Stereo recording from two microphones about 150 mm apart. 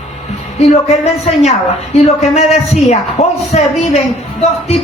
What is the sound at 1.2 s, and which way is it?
Speech, 50° left (ahead or behind).